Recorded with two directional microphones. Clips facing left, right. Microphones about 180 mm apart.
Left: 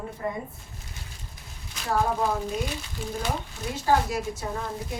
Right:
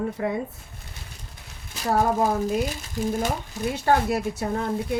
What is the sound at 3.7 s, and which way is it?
Speech, 65° right (ahead or behind).